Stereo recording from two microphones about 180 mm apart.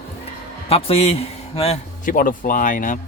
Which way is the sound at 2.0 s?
50° left (ahead or behind).